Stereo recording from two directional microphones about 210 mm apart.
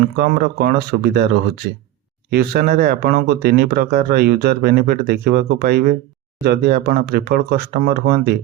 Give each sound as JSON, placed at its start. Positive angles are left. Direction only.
{"t": 0.0, "sound": "speech", "side_deg": -45}
{"t": 2.3, "sound": "speech", "side_deg": -45}